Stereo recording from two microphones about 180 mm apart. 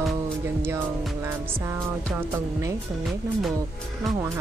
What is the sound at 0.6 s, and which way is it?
Speech, 15° right (ahead or behind).